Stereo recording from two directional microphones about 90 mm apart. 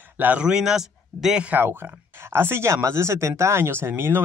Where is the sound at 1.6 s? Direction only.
25° right (ahead or behind).